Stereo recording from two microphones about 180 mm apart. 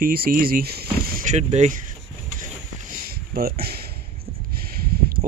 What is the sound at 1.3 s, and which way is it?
Speech, 40° right (ahead or behind).